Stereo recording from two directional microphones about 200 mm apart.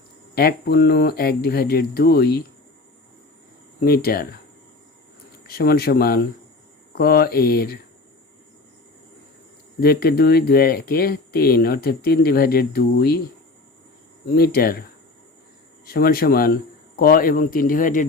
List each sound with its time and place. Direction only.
0.3 s speech: 50° left (ahead or behind)
3.8 s speech: 50° left (ahead or behind)
5.5 s speech: 50° left (ahead or behind)
9.8 s speech: 50° left (ahead or behind)
14.3 s speech: 50° left (ahead or behind)
15.9 s speech: 50° left (ahead or behind)